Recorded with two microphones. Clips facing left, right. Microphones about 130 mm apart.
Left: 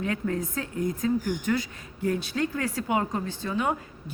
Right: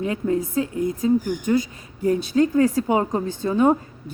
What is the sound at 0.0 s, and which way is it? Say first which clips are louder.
Speech: right 6 dB; 20° right (ahead or behind).